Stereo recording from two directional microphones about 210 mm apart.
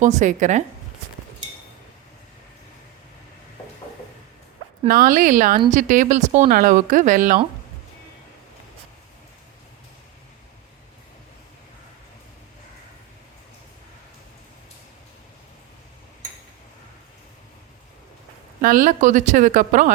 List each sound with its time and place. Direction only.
0.0 s speech: 35° right (ahead or behind)
4.9 s speech: 40° right (ahead or behind)
18.6 s speech: 40° right (ahead or behind)